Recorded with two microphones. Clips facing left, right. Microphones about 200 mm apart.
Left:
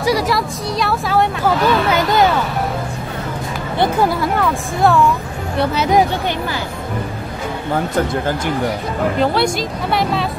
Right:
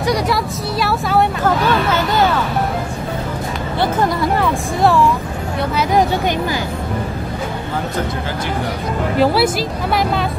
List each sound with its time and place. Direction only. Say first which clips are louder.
0.0 s speech: left 1 dB; centre (ahead or behind)
1.4 s a sound: left 1 dB; 15° left (ahead or behind)
4.0 s speech: even; centre (ahead or behind)
9.2 s speech: right 4 dB; 5° right (ahead or behind)